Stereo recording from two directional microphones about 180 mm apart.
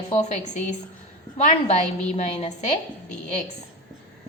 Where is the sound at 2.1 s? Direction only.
35° left (ahead or behind).